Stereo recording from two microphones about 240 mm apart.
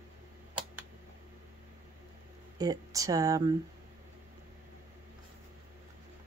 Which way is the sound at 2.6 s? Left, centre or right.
Centre.